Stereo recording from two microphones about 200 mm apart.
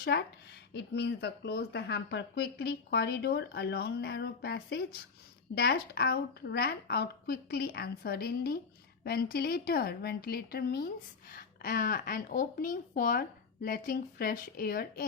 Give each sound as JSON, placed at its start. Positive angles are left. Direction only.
{"t": 0.0, "sound": "speech", "side_deg": 55}